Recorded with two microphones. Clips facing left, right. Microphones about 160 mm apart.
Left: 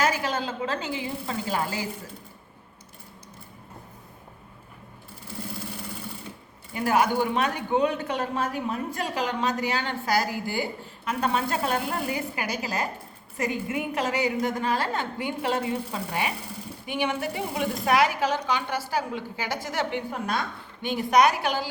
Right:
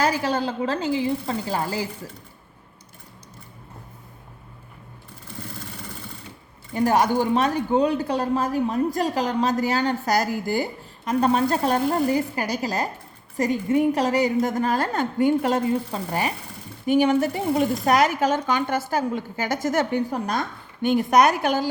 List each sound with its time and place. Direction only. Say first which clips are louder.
0.0 s a woman's voice: right 4 dB; 35° right (ahead or behind)
6.7 s a woman's voice: right 3 dB; 40° right (ahead or behind)